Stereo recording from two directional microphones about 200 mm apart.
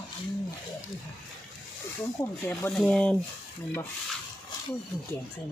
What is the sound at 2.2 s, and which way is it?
Speech, 10° left (ahead or behind).